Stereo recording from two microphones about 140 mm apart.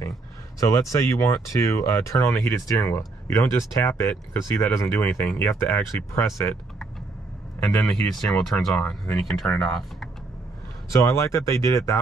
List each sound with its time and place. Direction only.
0.6 s speech: 20° left (ahead or behind)
7.6 s speech: 5° left (ahead or behind)
10.9 s speech: 20° left (ahead or behind)